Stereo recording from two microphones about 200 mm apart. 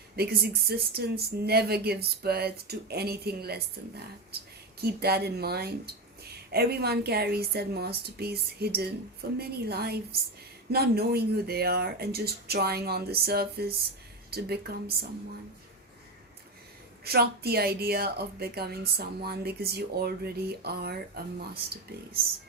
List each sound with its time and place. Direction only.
0.2 s speech: 50° right (ahead or behind)
17.0 s speech: 50° right (ahead or behind)